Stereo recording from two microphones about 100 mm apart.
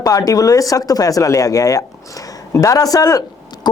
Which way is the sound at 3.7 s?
45° left (ahead or behind).